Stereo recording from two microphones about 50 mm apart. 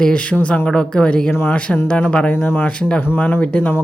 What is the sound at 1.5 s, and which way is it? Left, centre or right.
Speech, left.